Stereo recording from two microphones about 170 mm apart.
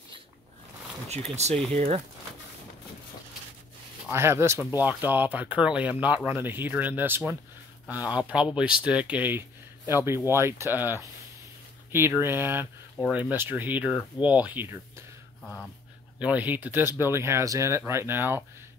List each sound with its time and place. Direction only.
1.0 s speech: 40° right (ahead or behind)
4.1 s speech: 15° right (ahead or behind)
15.4 s dog: 10° left (ahead or behind)
16.2 s speech: 10° right (ahead or behind)